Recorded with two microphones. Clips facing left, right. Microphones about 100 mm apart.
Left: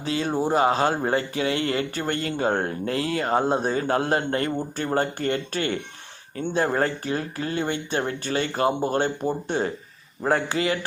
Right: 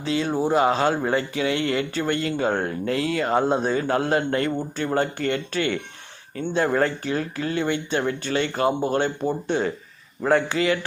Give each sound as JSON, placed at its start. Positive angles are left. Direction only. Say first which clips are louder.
{"t": 0.0, "sound": "speech", "louder": "right 1 dB", "side_deg": 35}